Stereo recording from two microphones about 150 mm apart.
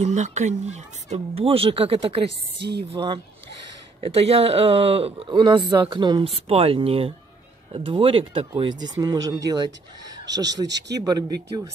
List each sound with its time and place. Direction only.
0.0 s speech: 50° right (ahead or behind); by 11.6 s 25° right (ahead or behind)